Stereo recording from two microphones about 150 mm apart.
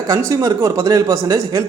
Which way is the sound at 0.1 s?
20° right (ahead or behind).